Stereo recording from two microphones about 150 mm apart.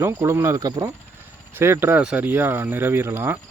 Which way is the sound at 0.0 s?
15° right (ahead or behind).